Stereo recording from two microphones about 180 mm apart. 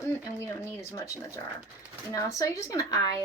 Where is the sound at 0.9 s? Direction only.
15° left (ahead or behind).